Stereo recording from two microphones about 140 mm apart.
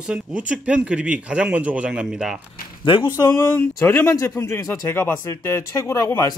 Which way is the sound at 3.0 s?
20° left (ahead or behind).